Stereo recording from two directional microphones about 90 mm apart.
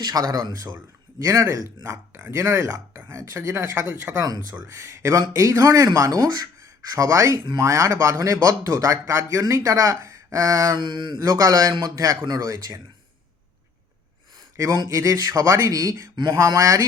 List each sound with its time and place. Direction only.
0.0 s speech: 45° right (ahead or behind)
1.2 s speech: 35° right (ahead or behind)
2.6 s a sound: 20° right (ahead or behind)
3.3 s speech: 30° right (ahead or behind)
4.6 s speech: 35° right (ahead or behind)
10.8 s mantra: 60° right (ahead or behind)
11.3 s speech: 45° right (ahead or behind)
14.5 s speech: 35° right (ahead or behind)